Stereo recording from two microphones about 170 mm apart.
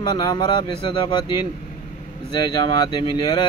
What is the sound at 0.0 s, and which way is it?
Speech, 25° left (ahead or behind).